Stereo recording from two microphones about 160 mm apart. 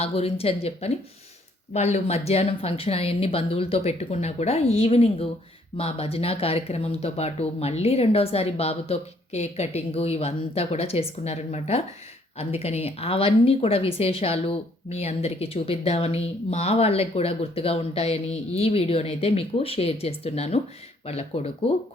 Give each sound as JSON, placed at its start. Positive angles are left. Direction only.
{"t": 0.0, "sound": "speech", "side_deg": 40}